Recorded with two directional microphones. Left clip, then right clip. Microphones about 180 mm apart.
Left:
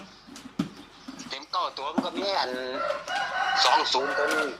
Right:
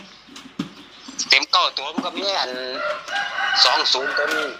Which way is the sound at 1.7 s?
10° left (ahead or behind).